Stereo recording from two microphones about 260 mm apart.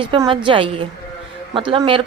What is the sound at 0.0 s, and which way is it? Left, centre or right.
Speech, centre.